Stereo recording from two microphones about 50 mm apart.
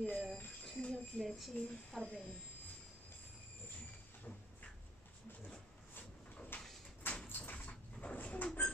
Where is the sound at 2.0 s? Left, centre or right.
Left.